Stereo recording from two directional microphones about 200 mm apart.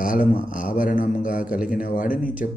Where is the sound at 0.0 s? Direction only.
45° left (ahead or behind).